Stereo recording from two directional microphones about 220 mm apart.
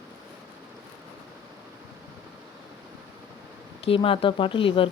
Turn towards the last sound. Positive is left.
turn(degrees=25)  # may be behind; listen again after turning